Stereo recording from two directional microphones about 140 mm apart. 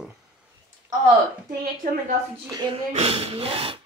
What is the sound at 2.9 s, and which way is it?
Speech, 45° right (ahead or behind).